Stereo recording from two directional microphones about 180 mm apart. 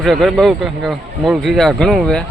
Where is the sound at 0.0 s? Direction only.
Centre (ahead or behind).